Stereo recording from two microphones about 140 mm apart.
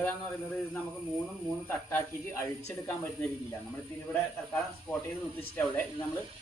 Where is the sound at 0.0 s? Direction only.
10° left (ahead or behind).